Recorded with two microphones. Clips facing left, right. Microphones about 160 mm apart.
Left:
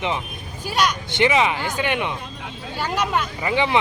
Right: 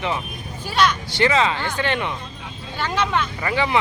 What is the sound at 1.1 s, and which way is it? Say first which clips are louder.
Speech: left 2 dB; 15° left (ahead or behind).